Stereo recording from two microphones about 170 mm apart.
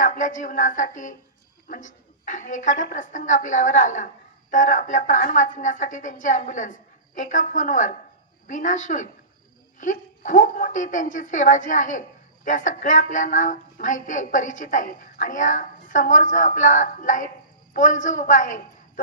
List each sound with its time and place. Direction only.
0.0 s a woman's voice: 50° left (ahead or behind)